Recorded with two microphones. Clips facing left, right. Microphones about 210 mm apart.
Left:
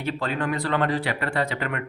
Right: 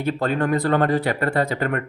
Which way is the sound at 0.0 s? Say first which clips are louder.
Right 5 dB; 45° right (ahead or behind).